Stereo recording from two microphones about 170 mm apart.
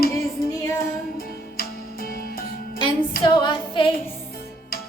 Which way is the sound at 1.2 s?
60° left (ahead or behind).